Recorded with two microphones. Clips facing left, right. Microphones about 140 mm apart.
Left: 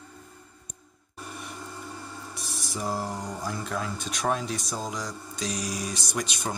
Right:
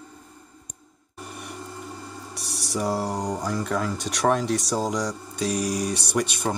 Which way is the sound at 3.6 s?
65° right (ahead or behind).